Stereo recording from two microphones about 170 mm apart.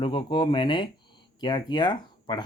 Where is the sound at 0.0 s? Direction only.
30° left (ahead or behind).